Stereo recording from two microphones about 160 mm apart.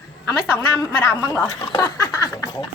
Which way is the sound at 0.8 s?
25° left (ahead or behind).